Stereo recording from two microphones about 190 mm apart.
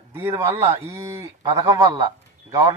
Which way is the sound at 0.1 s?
10° right (ahead or behind).